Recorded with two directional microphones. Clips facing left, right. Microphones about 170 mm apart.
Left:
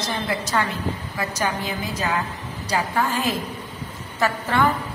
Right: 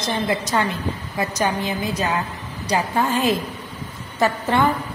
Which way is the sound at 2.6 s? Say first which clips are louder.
Right 3 dB; 20° right (ahead or behind).